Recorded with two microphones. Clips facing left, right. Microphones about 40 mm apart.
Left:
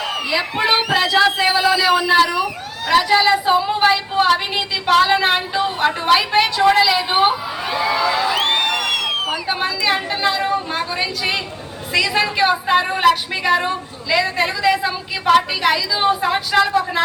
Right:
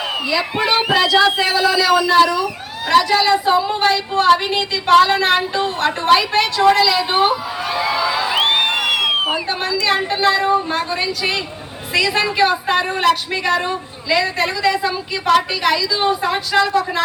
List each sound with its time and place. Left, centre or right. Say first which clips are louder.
0.5 s speech: left 1 dB; centre
0.9 s a woman's voice: right 3 dB; centre
4.2 s a woman's voice: right 5 dB; centre
8.3 s a sound: right 2 dB; right
9.5 s a woman's voice: right 1 dB; centre
12.5 s a woman's voice: left 1 dB; centre